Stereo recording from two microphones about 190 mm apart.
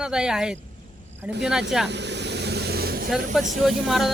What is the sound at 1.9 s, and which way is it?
Vehicle, 65° right (ahead or behind).